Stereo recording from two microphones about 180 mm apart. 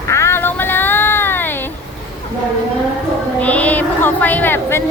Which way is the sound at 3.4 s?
10° left (ahead or behind).